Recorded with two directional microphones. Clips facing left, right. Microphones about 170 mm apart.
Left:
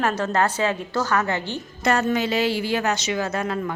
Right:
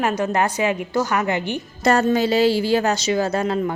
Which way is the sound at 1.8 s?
35° right (ahead or behind).